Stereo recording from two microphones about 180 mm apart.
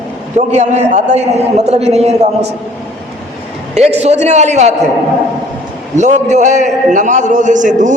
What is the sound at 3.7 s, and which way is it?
A man's voice, 35° right (ahead or behind).